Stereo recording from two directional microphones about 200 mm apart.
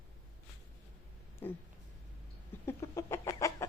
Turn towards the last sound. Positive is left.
turn(degrees=15)  # may be behind; listen again after turning